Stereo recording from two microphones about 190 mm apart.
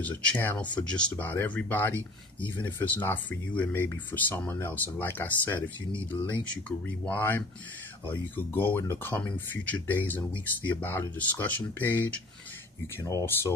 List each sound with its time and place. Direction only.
0.0 s speech: 10° left (ahead or behind)
7.1 s speech: 10° left (ahead or behind)